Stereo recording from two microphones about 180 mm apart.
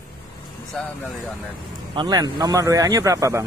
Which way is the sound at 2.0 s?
20° right (ahead or behind).